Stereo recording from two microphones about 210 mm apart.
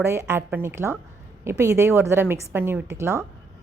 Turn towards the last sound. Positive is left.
turn(degrees=-10)  # may be behind; listen again after turning